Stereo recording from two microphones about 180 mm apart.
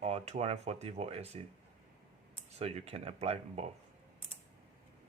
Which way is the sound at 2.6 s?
35° right (ahead or behind).